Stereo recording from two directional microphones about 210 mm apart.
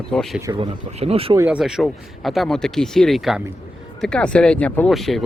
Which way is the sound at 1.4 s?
5° right (ahead or behind).